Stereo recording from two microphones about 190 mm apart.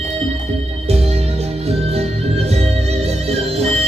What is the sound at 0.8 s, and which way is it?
Music, 35° right (ahead or behind).